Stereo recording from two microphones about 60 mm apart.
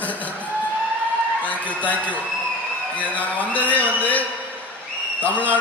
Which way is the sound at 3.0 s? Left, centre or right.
Left.